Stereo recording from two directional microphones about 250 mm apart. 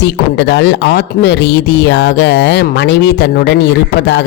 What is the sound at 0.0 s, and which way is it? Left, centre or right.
Speech, left.